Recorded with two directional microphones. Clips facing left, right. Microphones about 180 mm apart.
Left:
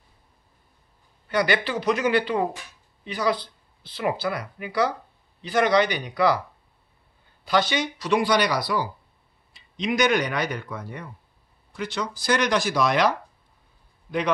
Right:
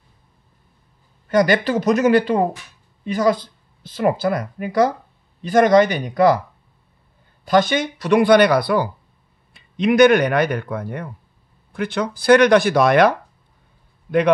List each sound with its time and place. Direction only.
1.3 s speech: 45° right (ahead or behind)
7.4 s speech: 50° right (ahead or behind)